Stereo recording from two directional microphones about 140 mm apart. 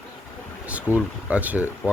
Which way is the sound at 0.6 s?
10° right (ahead or behind).